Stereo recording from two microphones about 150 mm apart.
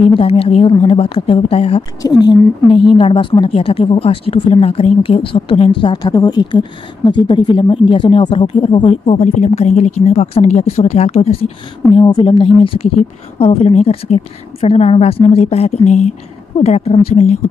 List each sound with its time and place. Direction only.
0.0 s speech: 40° left (ahead or behind)
1.8 s speech: 25° left (ahead or behind); by 12.0 s 45° left (ahead or behind)
12.0 s speech: 25° left (ahead or behind)
12.3 s a woman's voice: 35° left (ahead or behind)